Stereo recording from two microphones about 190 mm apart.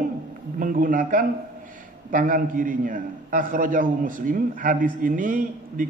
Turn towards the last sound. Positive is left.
turn(degrees=-45)  # may be behind; listen again after turning